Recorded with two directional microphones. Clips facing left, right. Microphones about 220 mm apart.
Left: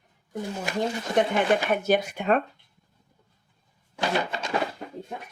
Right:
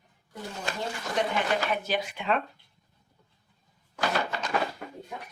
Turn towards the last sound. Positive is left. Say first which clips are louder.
# left 2 dB
turn(degrees=20)  # may be behind; listen again after turning